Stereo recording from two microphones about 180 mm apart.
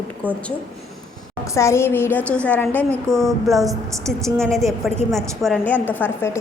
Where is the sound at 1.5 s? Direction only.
15° left (ahead or behind); by 3.8 s centre (ahead or behind).